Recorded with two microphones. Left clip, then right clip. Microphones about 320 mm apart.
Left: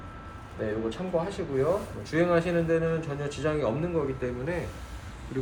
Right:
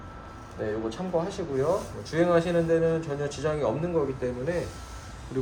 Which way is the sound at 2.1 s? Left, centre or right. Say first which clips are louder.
Right 1 dB; centre.